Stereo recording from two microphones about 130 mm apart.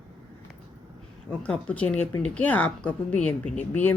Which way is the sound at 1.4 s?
10° left (ahead or behind).